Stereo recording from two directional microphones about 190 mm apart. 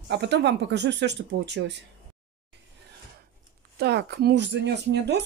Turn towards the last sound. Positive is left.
turn(degrees=-65)  # may be behind; listen again after turning